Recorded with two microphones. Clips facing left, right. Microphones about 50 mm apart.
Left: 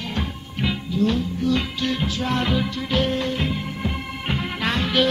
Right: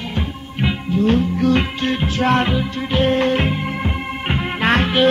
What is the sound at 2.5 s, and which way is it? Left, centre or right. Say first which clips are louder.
Music: right 2 dB; right.